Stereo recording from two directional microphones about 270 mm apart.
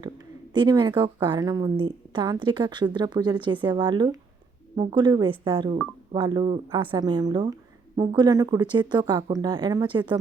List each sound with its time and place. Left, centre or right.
0.5 s a woman's voice: centre